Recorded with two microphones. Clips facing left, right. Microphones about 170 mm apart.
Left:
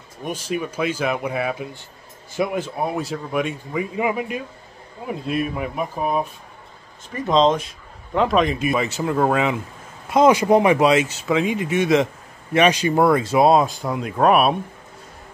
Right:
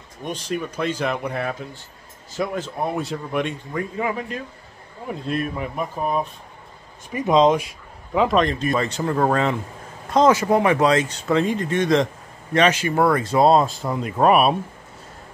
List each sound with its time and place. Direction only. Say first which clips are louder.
0.2 s a man's voice: left 1 dB; 5° left (ahead or behind)
7.1 s speech: right 1 dB; 10° right (ahead or behind)
8.1 s a man's voice: even; centre (ahead or behind)